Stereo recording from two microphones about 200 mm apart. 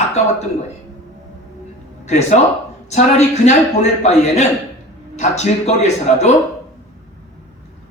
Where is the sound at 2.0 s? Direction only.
35° left (ahead or behind).